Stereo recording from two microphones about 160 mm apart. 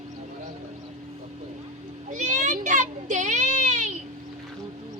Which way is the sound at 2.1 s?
50° right (ahead or behind).